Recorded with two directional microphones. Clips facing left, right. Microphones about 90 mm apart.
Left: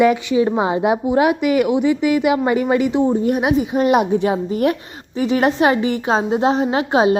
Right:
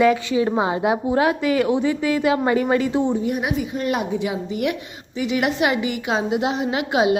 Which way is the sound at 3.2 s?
55° left (ahead or behind).